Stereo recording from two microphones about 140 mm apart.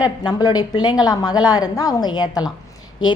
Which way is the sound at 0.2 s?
30° left (ahead or behind).